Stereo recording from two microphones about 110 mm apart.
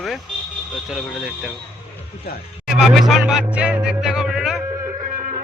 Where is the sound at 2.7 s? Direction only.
Centre (ahead or behind).